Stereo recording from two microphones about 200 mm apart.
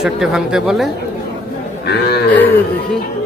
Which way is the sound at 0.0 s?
5° right (ahead or behind).